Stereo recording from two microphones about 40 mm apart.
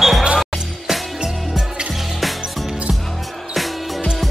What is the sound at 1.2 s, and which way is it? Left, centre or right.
Music, centre.